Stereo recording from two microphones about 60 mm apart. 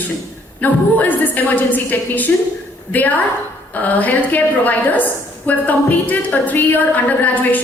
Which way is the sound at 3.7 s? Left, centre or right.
Left.